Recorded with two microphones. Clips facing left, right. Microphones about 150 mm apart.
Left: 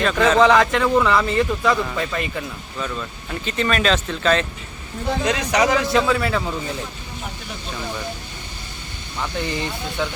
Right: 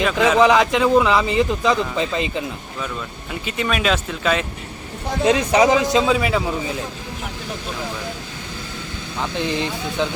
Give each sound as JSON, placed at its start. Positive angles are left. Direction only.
{"t": 0.0, "sound": "speech", "side_deg": -10}
{"t": 3.4, "sound": "speech", "side_deg": -10}
{"t": 5.2, "sound": "a man's voice", "side_deg": -25}